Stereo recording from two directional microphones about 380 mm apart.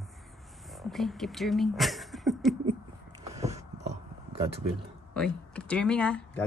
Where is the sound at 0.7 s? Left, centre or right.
Centre.